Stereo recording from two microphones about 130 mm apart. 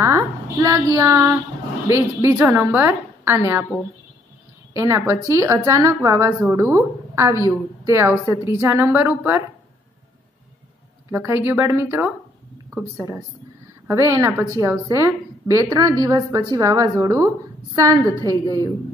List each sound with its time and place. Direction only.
0.0 s a woman's voice: 20° right (ahead or behind)
4.7 s a woman's voice: 20° right (ahead or behind)
11.1 s a woman's voice: 20° right (ahead or behind)
13.8 s a woman's voice: 20° right (ahead or behind)